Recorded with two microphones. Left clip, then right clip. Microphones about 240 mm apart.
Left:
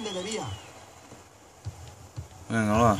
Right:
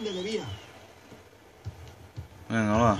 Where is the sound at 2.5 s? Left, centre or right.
Centre.